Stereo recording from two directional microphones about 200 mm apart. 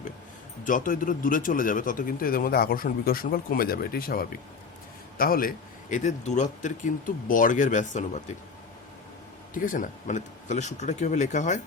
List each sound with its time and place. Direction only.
0.6 s a man's voice: 40° left (ahead or behind)
9.6 s speech: 40° left (ahead or behind)